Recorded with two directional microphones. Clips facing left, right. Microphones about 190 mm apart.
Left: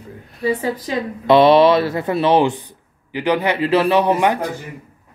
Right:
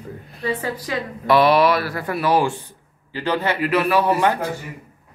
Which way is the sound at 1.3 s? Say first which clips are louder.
Left 5 dB; 25° left (ahead or behind).